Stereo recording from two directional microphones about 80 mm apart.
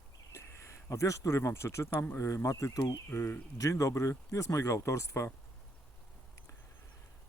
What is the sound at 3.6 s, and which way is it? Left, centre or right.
Speech, left.